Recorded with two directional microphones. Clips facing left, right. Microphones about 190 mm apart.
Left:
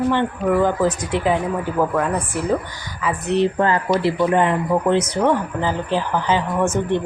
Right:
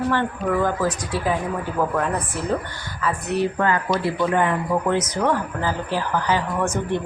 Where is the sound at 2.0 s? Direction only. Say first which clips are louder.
Left 3 dB; 5° left (ahead or behind).